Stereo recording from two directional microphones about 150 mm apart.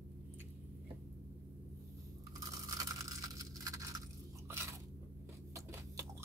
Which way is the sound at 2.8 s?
25° right (ahead or behind).